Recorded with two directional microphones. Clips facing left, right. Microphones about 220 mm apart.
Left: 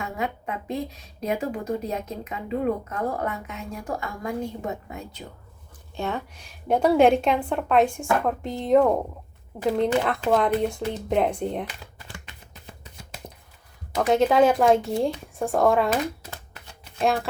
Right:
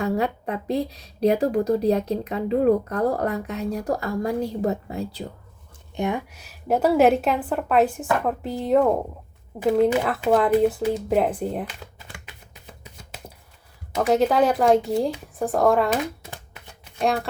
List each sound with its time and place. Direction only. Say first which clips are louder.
0.0 s speech: right 6 dB; 35° right (ahead or behind)
5.9 s a woman's voice: right 4 dB; 15° right (ahead or behind)
12.8 s a sound: even; 10° right (ahead or behind)
13.9 s a woman's voice: even; centre (ahead or behind)
16.6 s shuffling cards: even; centre (ahead or behind)